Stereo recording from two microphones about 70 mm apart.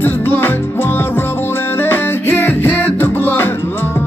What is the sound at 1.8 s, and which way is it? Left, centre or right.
Music, left.